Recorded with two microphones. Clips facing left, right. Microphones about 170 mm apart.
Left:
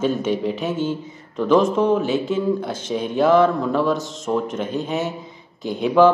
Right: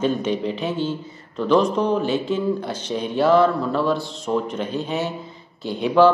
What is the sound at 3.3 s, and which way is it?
A man's voice, 10° left (ahead or behind).